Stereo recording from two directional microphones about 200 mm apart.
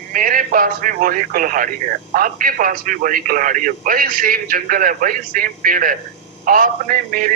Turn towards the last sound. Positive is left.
turn(degrees=-45)  # may be behind; listen again after turning